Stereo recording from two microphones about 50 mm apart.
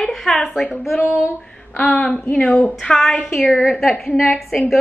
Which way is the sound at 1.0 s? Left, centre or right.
Left.